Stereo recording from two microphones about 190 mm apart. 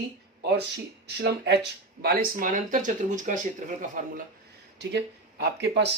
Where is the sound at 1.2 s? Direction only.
65° right (ahead or behind); by 4.2 s 40° right (ahead or behind).